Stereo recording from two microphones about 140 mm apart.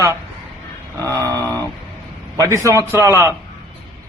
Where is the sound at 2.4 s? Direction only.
20° right (ahead or behind).